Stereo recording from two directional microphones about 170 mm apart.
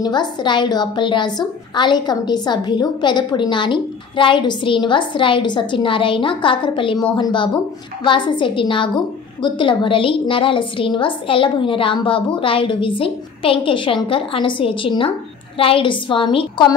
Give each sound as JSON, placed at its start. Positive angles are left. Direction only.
{"t": 0.0, "sound": "a woman's voice", "side_deg": 25}